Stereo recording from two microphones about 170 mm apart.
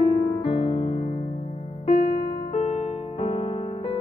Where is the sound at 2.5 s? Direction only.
40° left (ahead or behind).